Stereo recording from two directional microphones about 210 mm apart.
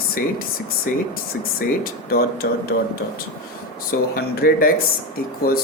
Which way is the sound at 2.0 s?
45° left (ahead or behind).